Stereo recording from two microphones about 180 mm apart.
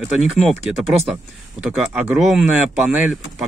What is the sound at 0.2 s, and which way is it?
Speech, centre (ahead or behind).